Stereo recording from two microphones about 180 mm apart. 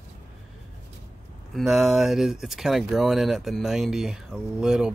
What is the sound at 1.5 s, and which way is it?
Speech, centre (ahead or behind).